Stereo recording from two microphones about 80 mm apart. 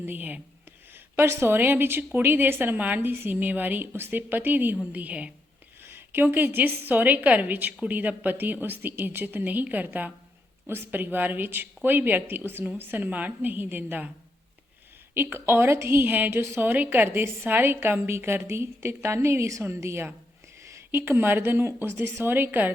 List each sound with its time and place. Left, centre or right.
0.0 s a woman's voice: right
15.1 s a woman's voice: right